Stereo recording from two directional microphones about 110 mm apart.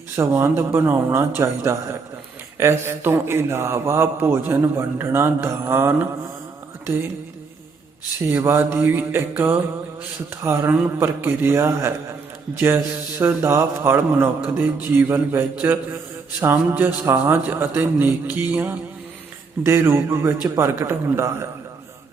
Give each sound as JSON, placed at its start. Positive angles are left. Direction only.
{"t": 0.2, "sound": "a man's voice", "side_deg": -25}
{"t": 2.6, "sound": "a man's voice", "side_deg": -20}
{"t": 8.3, "sound": "a man's voice", "side_deg": -20}
{"t": 19.6, "sound": "a man's voice", "side_deg": -25}